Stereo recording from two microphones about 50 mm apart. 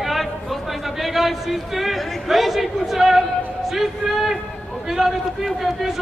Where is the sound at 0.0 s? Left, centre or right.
Centre.